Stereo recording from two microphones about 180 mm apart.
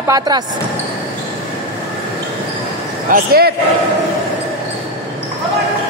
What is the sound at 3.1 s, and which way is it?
Speech, 60° right (ahead or behind).